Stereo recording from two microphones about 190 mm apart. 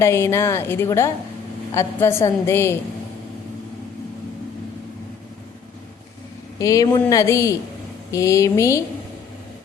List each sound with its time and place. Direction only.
0.0 s a woman's voice: 15° left (ahead or behind)
6.6 s a woman's voice: 20° left (ahead or behind)